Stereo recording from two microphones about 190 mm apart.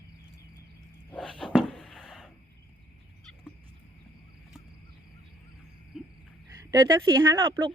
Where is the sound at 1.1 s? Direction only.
5° left (ahead or behind).